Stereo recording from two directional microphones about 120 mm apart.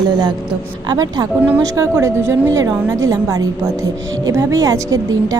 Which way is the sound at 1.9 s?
20° right (ahead or behind).